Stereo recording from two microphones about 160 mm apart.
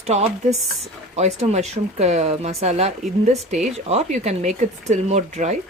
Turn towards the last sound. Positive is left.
turn(degrees=-45)  # may be behind; listen again after turning